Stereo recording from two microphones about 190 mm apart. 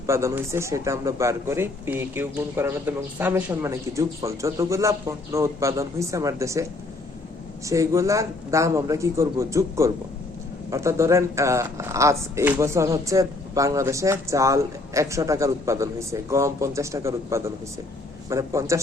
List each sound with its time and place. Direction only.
0.1 s speech: 15° right (ahead or behind)
7.7 s speech: 15° right (ahead or behind)